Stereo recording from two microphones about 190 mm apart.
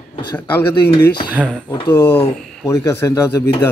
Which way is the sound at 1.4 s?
10° left (ahead or behind).